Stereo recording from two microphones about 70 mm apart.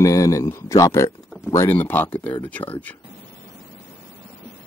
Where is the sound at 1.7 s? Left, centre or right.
Left.